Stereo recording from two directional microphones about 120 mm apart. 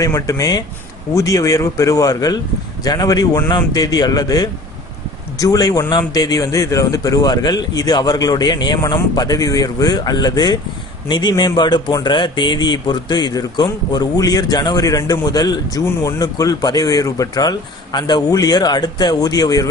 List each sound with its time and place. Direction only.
0.0 s a man's voice: 30° left (ahead or behind)